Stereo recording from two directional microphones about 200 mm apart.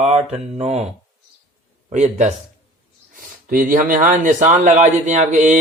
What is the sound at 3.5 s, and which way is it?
Mantra, 45° right (ahead or behind).